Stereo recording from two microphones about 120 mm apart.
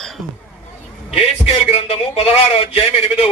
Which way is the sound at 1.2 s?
55° left (ahead or behind).